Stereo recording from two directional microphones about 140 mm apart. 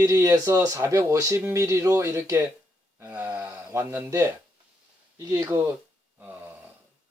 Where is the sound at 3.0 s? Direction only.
20° right (ahead or behind).